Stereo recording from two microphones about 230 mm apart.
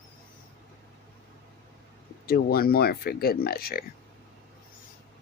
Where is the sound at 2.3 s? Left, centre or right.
Left.